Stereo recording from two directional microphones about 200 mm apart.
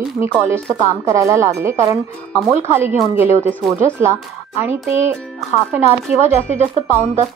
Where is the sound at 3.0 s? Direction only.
10° right (ahead or behind).